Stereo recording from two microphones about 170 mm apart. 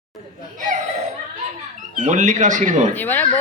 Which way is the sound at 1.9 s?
50° right (ahead or behind).